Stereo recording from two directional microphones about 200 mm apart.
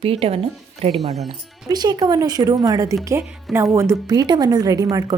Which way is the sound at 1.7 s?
20° right (ahead or behind).